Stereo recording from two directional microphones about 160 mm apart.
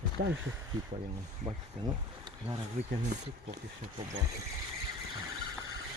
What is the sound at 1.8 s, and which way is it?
Speech, 25° right (ahead or behind).